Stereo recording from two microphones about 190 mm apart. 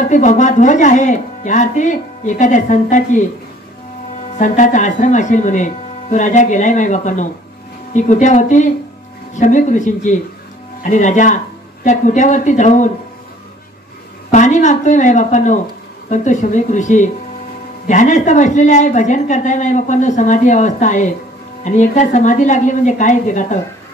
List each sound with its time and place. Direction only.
0.0 s a woman's voice: 40° left (ahead or behind)
4.4 s a woman's voice: 40° left (ahead or behind)
14.3 s a woman's voice: 40° left (ahead or behind)